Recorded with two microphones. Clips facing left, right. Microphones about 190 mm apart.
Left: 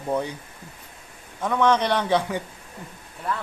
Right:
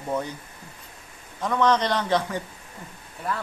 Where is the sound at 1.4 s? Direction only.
10° left (ahead or behind).